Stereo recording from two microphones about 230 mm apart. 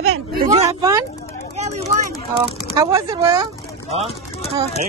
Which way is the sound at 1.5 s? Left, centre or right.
Right.